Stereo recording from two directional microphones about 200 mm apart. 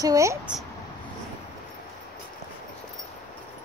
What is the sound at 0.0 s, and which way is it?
Speech, 15° right (ahead or behind).